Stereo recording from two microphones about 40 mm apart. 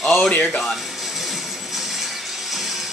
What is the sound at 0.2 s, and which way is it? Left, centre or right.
Speech, left.